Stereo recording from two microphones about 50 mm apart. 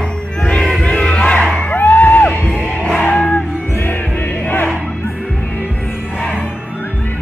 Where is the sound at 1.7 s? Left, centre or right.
Left.